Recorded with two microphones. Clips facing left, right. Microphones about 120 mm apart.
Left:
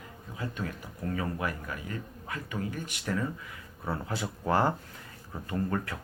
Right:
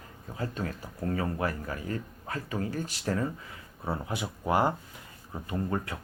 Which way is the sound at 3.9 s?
20° right (ahead or behind).